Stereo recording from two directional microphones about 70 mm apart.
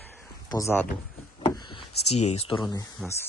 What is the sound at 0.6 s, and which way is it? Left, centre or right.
Speech, left.